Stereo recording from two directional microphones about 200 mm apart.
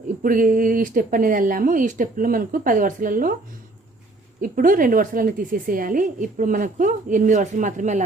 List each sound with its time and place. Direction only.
0.2 s speech: 40° right (ahead or behind)
4.4 s a woman's voice: 40° right (ahead or behind)